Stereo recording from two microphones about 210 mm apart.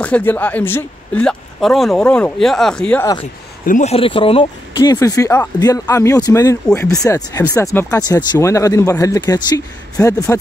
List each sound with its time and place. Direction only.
0.0 s speech: 10° left (ahead or behind)
3.6 s speech: 35° left (ahead or behind); by 10.1 s 15° left (ahead or behind)